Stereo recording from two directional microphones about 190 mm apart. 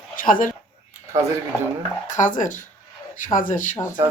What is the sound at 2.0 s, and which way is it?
A woman's voice, 40° left (ahead or behind).